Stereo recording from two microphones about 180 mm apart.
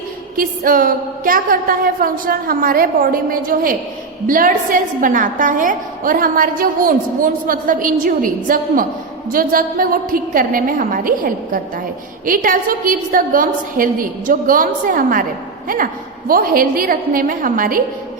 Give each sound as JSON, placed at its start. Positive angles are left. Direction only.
{"t": 0.3, "sound": "a woman's voice", "side_deg": -50}